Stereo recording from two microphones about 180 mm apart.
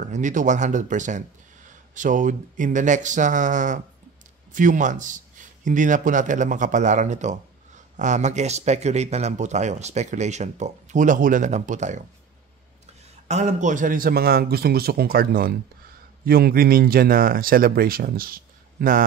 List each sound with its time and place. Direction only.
0.1 s speech: 45° right (ahead or behind)
13.3 s a man's voice: 40° right (ahead or behind)